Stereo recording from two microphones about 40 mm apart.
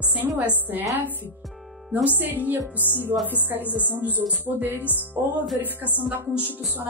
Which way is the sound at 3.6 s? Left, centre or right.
Left.